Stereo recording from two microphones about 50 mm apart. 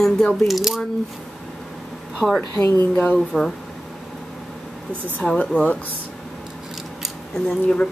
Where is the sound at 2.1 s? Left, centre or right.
Centre.